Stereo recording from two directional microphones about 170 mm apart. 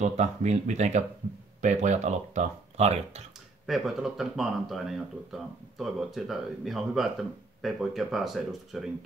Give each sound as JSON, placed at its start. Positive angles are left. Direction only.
{"t": 0.0, "sound": "speech", "side_deg": -40}
{"t": 3.6, "sound": "speech", "side_deg": 0}